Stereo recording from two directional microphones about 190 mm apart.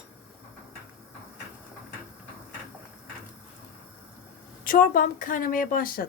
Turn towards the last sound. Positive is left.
turn(degrees=50)  # may be behind; listen again after turning